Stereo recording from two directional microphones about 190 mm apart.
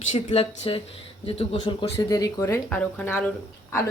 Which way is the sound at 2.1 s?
15° left (ahead or behind).